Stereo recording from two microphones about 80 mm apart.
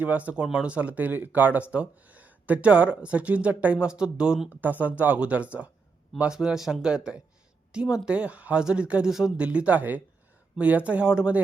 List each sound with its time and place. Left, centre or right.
0.0 s speech: centre
4.4 s speech: right